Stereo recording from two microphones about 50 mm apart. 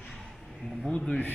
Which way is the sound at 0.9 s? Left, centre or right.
Left.